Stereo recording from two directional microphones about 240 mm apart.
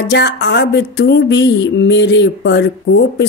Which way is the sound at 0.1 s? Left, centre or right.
Left.